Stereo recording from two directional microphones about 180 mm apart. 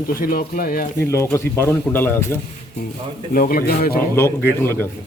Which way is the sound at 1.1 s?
15° left (ahead or behind).